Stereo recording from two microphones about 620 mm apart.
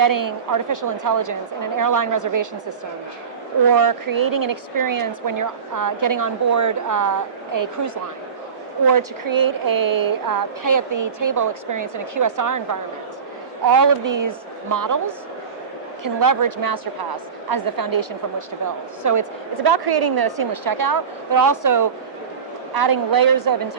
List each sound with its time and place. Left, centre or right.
0.0 s speech: right
3.7 s speech: right
13.7 s speech: right
16.0 s a woman's voice: right